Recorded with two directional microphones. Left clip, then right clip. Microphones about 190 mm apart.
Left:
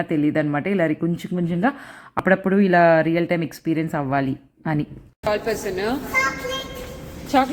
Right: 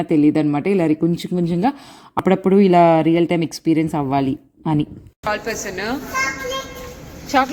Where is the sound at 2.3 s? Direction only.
15° right (ahead or behind).